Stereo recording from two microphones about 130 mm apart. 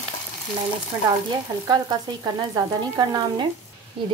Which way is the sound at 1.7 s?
30° right (ahead or behind).